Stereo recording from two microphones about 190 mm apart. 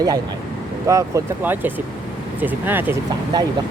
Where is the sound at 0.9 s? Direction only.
15° right (ahead or behind).